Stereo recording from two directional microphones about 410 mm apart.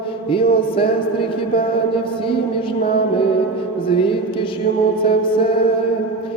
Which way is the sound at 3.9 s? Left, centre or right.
Centre.